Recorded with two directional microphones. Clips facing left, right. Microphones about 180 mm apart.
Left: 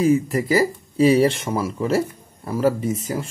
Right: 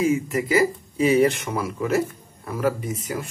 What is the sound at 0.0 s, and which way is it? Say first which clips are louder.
Speech: left 3 dB; 35° left (ahead or behind).